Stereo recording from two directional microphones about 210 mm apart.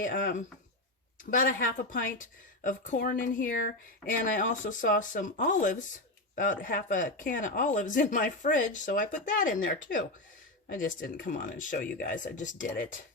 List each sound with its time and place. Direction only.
0.0 s speech: 40° left (ahead or behind)
11.3 s speech: 40° left (ahead or behind)